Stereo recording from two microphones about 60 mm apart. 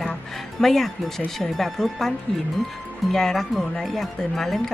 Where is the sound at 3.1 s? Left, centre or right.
Centre.